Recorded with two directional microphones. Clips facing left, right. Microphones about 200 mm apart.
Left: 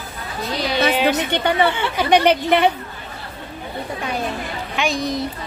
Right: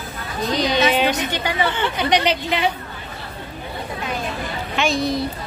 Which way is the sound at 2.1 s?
55° left (ahead or behind).